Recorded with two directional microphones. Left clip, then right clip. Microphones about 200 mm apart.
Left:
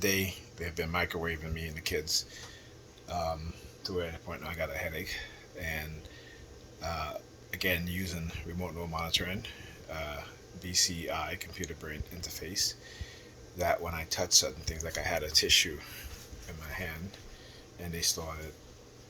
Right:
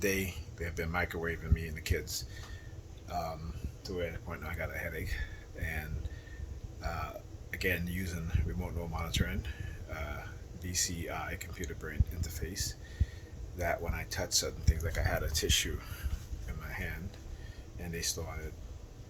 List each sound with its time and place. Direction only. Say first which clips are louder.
0.0 s speech: left 2 dB; 15° right (ahead or behind)
3.1 s speech: left 3 dB; 20° right (ahead or behind)
13.6 s speech: left 4 dB; 15° right (ahead or behind)
17.8 s speech: left 4 dB; 15° right (ahead or behind)